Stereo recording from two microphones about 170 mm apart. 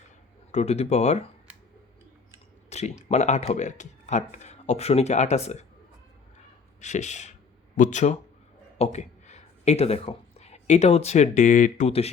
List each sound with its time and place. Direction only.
0.5 s speech: 40° left (ahead or behind)
2.6 s a sound: 40° left (ahead or behind)
3.1 s speech: 45° left (ahead or behind)
6.8 s speech: 45° left (ahead or behind)